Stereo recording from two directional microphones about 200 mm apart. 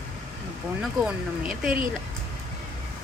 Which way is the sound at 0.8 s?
5° right (ahead or behind).